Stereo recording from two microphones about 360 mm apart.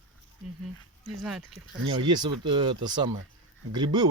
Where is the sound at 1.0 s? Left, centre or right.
Centre.